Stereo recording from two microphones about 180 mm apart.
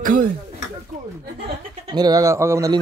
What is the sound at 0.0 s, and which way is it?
Speech, 50° right (ahead or behind).